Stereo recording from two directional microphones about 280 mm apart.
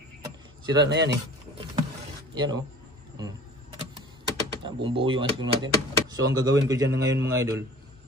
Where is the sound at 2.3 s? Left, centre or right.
Centre.